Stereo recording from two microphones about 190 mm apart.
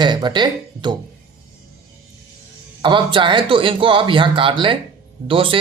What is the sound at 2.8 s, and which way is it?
Speech, 25° right (ahead or behind).